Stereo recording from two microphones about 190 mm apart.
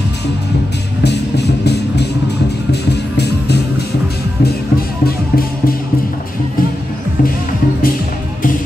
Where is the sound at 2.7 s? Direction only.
60° left (ahead or behind).